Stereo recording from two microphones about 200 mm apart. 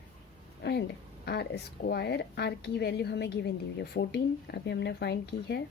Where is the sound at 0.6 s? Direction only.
55° left (ahead or behind).